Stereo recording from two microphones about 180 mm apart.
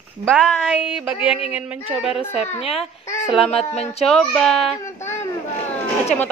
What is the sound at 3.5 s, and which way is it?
Speech, 35° left (ahead or behind).